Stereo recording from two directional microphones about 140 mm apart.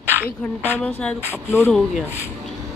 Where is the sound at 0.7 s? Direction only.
10° left (ahead or behind).